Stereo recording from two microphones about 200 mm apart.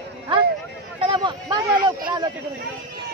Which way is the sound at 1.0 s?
25° right (ahead or behind).